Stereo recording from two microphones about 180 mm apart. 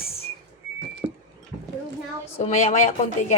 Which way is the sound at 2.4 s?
40° left (ahead or behind).